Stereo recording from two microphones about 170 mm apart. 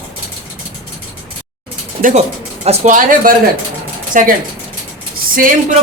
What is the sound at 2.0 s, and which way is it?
Speech, 50° right (ahead or behind).